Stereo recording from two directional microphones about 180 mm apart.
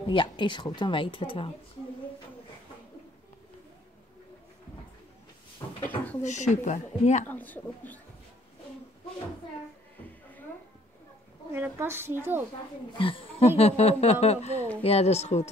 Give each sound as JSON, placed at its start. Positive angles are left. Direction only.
{"t": 0.1, "sound": "speech", "side_deg": 25}
{"t": 6.2, "sound": "speech", "side_deg": 40}
{"t": 7.2, "sound": "speech", "side_deg": 10}
{"t": 11.5, "sound": "a woman's voice", "side_deg": -15}
{"t": 12.9, "sound": "speech", "side_deg": 30}